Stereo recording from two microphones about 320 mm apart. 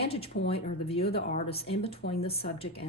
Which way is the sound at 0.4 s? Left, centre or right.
Centre.